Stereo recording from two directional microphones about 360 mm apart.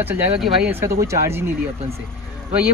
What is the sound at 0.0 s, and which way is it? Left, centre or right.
Speech, centre.